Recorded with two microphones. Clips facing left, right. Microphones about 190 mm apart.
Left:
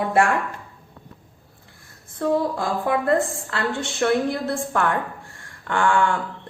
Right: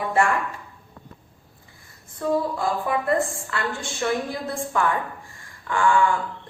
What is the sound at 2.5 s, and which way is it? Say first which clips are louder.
A woman's voice: left 2 dB; 80° left.